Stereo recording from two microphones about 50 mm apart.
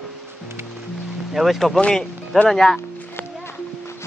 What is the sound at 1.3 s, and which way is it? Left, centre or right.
Speech, centre.